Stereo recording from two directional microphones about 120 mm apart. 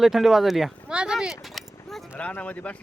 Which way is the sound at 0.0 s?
Centre (ahead or behind).